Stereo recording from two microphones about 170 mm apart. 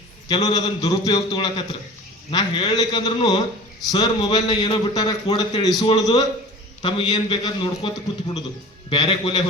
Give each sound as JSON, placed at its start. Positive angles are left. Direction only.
{"t": 0.4, "sound": "a man's voice", "side_deg": 20}